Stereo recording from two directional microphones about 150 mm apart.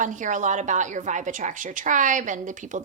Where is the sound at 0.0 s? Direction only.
55° right (ahead or behind).